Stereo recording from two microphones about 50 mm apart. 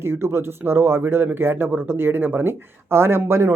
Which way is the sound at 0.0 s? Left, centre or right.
Right.